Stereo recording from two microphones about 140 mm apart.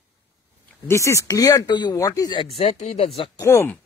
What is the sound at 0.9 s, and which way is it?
Speech, 20° left (ahead or behind).